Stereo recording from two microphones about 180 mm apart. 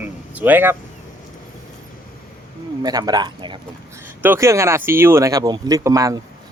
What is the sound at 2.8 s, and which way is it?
Speech, 20° right (ahead or behind).